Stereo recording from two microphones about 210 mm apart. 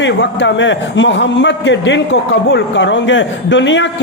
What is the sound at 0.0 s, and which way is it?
A man's voice, 60° left (ahead or behind).